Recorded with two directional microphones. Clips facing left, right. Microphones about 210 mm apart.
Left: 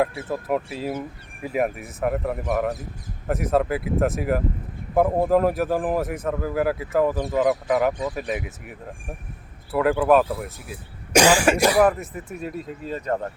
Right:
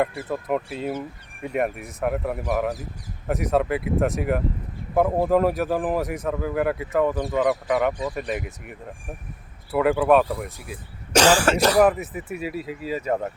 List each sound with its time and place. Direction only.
0.0 s speech: 5° left (ahead or behind)
9.7 s speech: centre (ahead or behind)
11.9 s speech: 5° right (ahead or behind)